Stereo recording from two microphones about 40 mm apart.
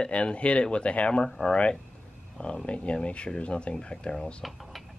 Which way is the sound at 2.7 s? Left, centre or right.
Left.